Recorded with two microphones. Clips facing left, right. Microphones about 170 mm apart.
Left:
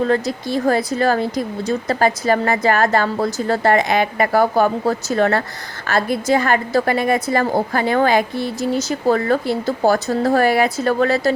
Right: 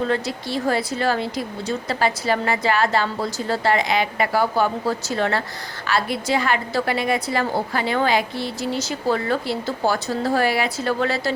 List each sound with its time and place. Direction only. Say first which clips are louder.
0.1 s a woman's voice: left 5 dB; 45° left (ahead or behind)